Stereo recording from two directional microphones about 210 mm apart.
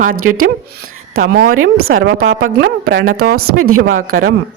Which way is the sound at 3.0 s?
90° right.